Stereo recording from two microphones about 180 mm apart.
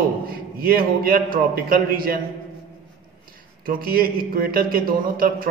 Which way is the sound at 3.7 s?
55° right (ahead or behind).